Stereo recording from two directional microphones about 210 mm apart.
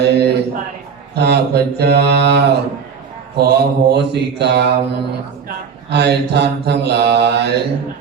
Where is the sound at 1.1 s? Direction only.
50° right (ahead or behind).